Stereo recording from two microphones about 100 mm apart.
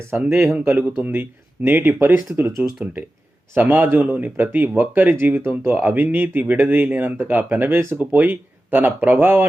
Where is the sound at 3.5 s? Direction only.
20° right (ahead or behind).